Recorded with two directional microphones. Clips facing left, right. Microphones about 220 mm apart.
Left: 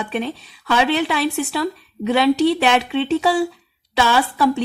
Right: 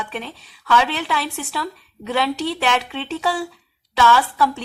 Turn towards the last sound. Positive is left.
turn(degrees=15)  # may be behind; listen again after turning